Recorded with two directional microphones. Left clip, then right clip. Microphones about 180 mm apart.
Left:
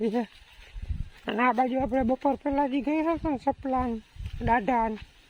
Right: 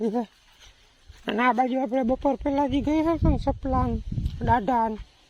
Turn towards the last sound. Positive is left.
turn(degrees=0)  # may be behind; listen again after turning